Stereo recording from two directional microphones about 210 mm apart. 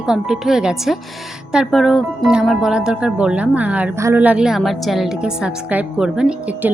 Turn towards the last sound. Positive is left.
turn(degrees=-5)  # may be behind; listen again after turning